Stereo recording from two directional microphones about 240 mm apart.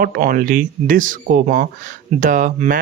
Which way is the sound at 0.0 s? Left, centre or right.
Right.